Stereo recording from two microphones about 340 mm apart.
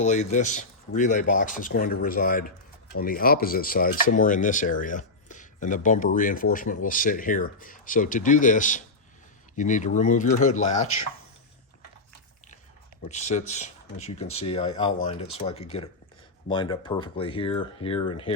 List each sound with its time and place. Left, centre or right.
0.0 s speech: left
13.1 s speech: centre